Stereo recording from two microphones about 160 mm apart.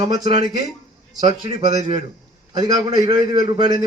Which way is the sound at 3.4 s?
30° right (ahead or behind).